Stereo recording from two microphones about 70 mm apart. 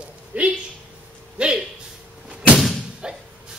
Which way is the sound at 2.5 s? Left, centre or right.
Centre.